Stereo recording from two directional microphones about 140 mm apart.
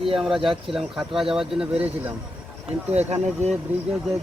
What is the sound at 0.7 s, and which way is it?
Speech, 5° right (ahead or behind).